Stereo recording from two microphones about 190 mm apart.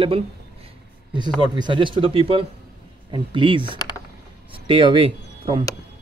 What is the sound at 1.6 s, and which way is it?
Speech, 25° right (ahead or behind).